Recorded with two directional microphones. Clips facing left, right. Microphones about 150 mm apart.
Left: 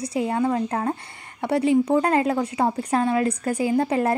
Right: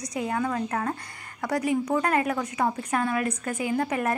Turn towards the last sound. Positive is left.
turn(degrees=30)  # may be behind; listen again after turning